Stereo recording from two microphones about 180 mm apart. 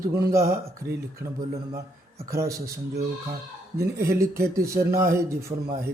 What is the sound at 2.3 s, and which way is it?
Mantra, 15° right (ahead or behind).